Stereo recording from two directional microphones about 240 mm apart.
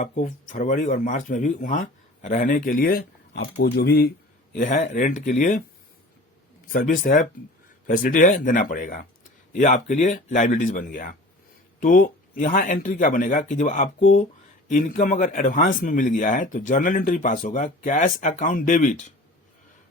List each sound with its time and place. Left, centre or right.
0.0 s speech: left
6.7 s speech: left